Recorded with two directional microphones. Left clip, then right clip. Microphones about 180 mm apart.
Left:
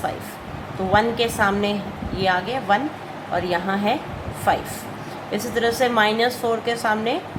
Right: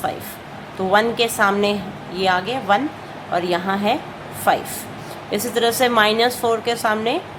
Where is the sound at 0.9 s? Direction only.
20° right (ahead or behind).